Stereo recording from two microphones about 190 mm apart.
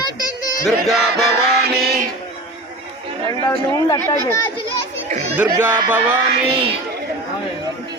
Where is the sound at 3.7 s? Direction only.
20° left (ahead or behind).